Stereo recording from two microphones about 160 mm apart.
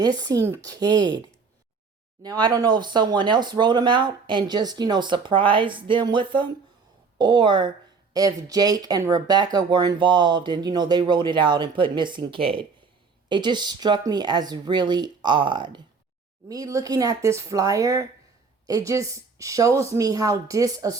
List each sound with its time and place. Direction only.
0.0 s speech: 25° right (ahead or behind)
2.2 s speech: 25° right (ahead or behind)